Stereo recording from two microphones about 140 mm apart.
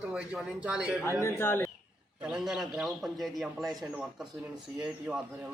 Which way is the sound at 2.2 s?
5° right (ahead or behind).